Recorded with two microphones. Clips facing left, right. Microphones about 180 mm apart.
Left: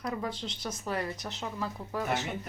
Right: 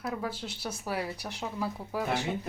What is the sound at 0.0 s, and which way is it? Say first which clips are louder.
Speech: even; 5° right (ahead or behind).